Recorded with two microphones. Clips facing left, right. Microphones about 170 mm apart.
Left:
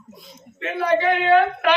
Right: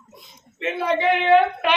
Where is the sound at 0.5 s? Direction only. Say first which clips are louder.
Left 2 dB; 20° right (ahead or behind).